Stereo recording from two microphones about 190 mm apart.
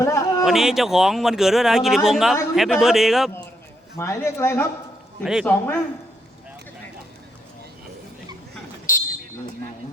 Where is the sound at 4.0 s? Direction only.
15° left (ahead or behind).